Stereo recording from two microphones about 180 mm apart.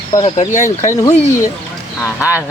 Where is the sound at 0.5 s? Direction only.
40° left (ahead or behind).